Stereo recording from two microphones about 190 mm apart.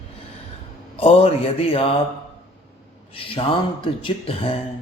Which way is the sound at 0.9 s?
30° left (ahead or behind).